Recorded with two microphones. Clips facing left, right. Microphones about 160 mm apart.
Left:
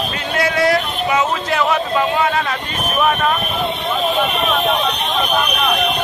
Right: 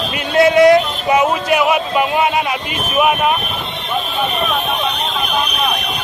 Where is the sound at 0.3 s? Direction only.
20° right (ahead or behind).